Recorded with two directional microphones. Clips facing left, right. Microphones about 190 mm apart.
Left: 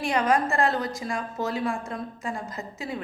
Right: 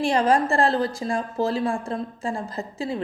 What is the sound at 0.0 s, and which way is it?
A woman's voice, 30° right (ahead or behind).